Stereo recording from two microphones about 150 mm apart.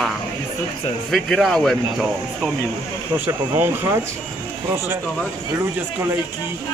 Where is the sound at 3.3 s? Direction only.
15° right (ahead or behind).